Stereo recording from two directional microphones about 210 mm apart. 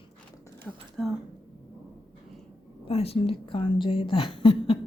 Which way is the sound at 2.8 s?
30° left (ahead or behind).